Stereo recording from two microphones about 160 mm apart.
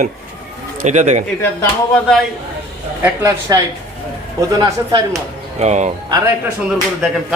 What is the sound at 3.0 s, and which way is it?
Speech, 20° right (ahead or behind).